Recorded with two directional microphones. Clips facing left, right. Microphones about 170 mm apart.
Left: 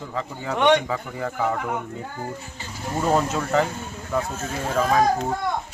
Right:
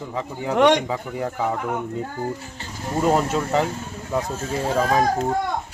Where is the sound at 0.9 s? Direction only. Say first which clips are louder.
Right 2 dB; 10° right (ahead or behind).